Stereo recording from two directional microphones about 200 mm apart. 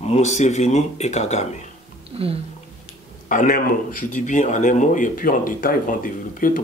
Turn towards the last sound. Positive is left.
turn(degrees=45)  # may be behind; listen again after turning